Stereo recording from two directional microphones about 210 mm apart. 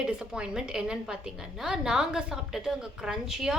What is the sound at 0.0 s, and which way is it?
A woman's voice, 5° right (ahead or behind).